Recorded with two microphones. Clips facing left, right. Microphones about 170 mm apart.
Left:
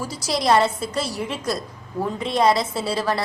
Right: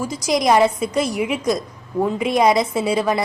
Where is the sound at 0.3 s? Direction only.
15° right (ahead or behind).